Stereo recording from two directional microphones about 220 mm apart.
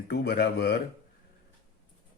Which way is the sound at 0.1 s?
45° left (ahead or behind).